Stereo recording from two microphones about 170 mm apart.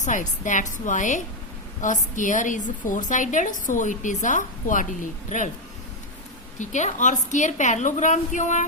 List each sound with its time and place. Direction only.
0.0 s a woman's voice: 50° left (ahead or behind)
6.6 s a woman's voice: 45° left (ahead or behind)